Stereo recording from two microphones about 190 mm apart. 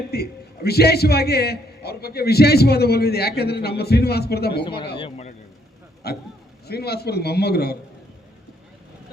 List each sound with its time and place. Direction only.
0.1 s a man's voice: 55° left (ahead or behind)
4.9 s a man's voice: 30° left (ahead or behind)
6.0 s a man's voice: 55° left (ahead or behind)